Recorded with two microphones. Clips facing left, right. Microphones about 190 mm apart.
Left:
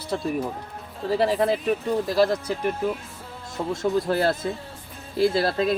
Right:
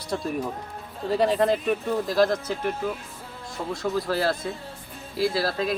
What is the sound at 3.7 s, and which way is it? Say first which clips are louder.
Speech: left 3 dB; 25° left (ahead or behind).